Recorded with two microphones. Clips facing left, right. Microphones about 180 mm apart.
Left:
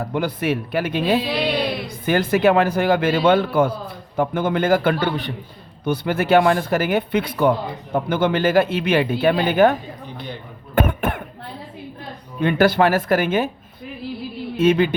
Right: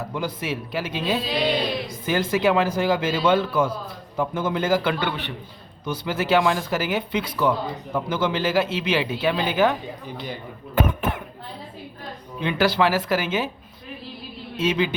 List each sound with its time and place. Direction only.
0.1 s a man's voice: 60° left (ahead or behind); by 5.3 s 40° left (ahead or behind)
5.8 s a man's voice: 55° left (ahead or behind)
10.8 s cough: 60° left (ahead or behind)
12.4 s speech: 50° left (ahead or behind)
14.6 s speech: 55° left (ahead or behind)